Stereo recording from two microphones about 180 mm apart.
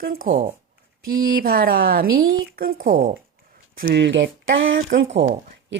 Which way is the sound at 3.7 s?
60° right (ahead or behind).